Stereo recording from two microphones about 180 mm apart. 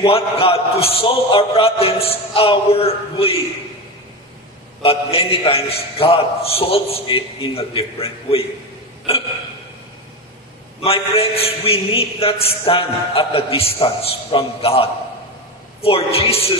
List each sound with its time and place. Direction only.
0.0 s a man's voice: 30° left (ahead or behind)
4.8 s a man's voice: 30° left (ahead or behind)
10.8 s a man's voice: 30° left (ahead or behind)